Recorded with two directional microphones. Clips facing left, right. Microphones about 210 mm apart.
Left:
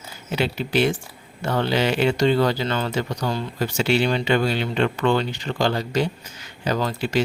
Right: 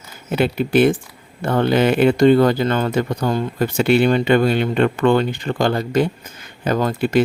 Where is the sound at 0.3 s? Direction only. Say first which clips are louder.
Right 6 dB; 55° right (ahead or behind).